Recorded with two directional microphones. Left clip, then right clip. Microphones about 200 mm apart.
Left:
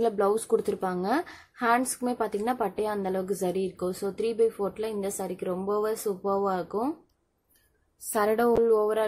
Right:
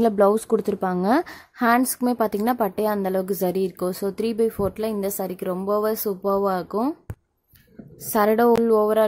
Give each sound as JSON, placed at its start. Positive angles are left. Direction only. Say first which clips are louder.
{"t": 0.0, "sound": "speech", "louder": "right 7 dB", "side_deg": -35}
{"t": 8.1, "sound": "a woman's voice", "louder": "right 6 dB", "side_deg": -40}